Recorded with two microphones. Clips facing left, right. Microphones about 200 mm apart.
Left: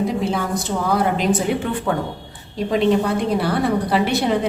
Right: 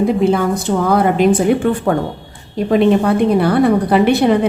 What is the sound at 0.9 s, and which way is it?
Speech, 55° right (ahead or behind).